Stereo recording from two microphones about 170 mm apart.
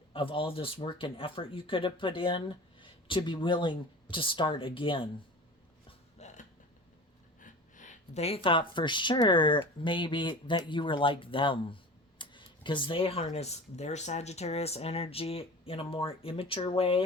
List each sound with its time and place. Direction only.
0.1 s speech: 30° left (ahead or behind)
6.1 s music: 45° left (ahead or behind)
7.3 s gasp: 50° left (ahead or behind)
8.4 s speech: 30° left (ahead or behind)